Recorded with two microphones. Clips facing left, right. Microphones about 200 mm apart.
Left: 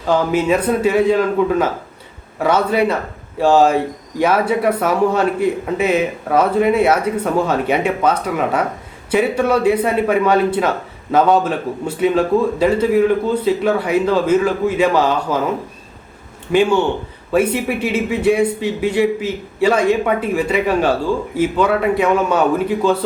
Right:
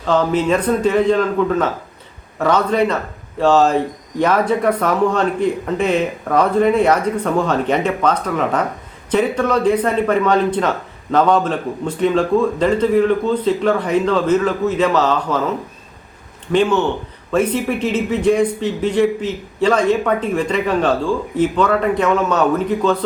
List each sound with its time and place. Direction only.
0.1 s speech: 10° left (ahead or behind)
16.5 s speech: 10° left (ahead or behind)